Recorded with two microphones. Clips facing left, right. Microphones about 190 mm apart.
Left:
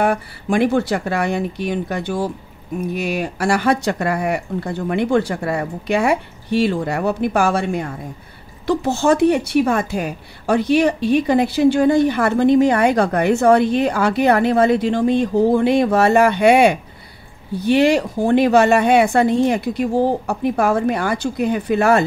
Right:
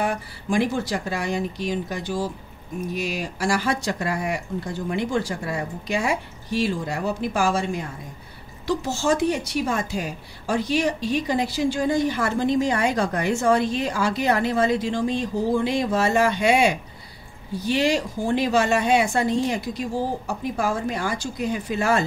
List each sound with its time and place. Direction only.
0.0 s a woman's voice: 60° left (ahead or behind)